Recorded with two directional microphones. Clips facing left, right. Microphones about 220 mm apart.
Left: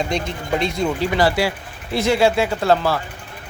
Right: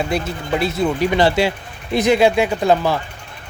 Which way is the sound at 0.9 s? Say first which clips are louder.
Right 3 dB; 20° right (ahead or behind).